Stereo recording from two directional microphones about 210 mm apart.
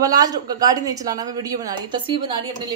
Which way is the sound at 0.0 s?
15° right (ahead or behind).